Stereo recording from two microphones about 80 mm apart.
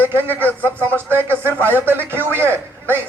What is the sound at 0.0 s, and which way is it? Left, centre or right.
A man's voice, right.